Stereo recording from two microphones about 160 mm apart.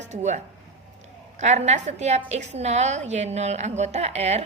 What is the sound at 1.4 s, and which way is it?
A woman's voice, 45° right (ahead or behind).